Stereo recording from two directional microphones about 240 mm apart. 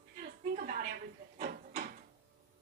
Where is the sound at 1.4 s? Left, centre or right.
Right.